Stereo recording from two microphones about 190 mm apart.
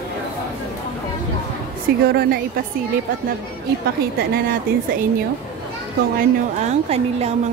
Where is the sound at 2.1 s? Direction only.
55° right (ahead or behind).